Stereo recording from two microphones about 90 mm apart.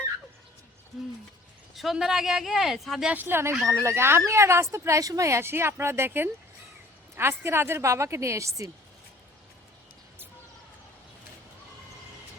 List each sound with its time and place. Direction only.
1.7 s speech: centre (ahead or behind)
3.1 s a woman's voice: 20° right (ahead or behind)